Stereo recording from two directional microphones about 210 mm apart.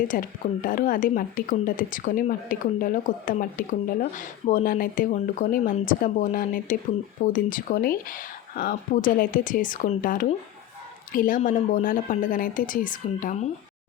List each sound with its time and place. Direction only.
0.1 s speech: 40° left (ahead or behind)